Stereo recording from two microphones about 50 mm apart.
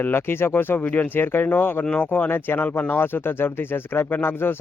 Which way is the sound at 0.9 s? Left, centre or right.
Left.